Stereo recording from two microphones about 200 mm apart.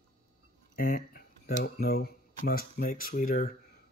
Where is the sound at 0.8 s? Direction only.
45° left (ahead or behind).